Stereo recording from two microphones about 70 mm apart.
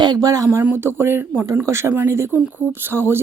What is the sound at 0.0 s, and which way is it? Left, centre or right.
Speech, right.